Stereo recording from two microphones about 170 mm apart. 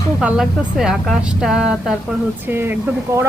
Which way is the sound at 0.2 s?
5° right (ahead or behind).